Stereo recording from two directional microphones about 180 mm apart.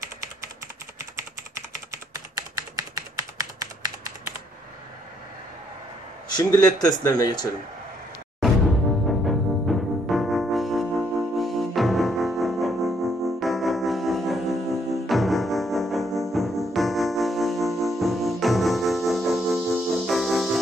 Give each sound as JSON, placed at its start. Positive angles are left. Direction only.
{"t": 1.1, "sound": "typing", "side_deg": -15}
{"t": 6.3, "sound": "speech", "side_deg": 20}
{"t": 9.2, "sound": "music", "side_deg": 0}